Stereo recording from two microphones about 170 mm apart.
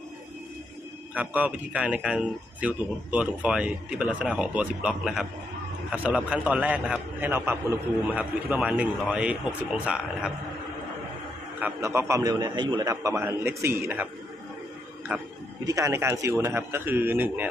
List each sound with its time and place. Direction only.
1.1 s speech: 10° right (ahead or behind)
11.6 s speech: 15° right (ahead or behind)
15.1 s speech: 10° right (ahead or behind)